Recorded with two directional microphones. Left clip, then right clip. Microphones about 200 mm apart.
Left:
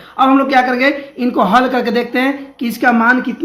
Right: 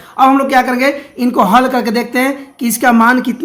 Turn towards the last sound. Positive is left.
turn(degrees=-25)  # may be behind; listen again after turning